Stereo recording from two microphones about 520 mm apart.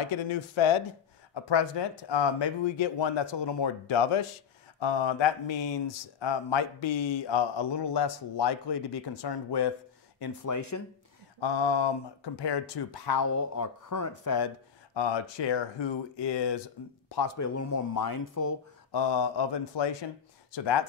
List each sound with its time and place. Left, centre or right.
0.3 s speech: left
1.3 s speech: left
11.3 s speech: left
15.0 s speech: left
17.4 s speech: left
18.9 s speech: left